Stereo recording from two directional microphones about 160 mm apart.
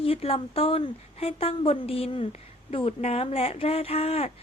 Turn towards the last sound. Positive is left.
turn(degrees=40)  # may be behind; listen again after turning